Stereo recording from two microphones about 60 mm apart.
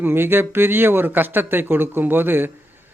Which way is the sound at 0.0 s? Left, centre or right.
Right.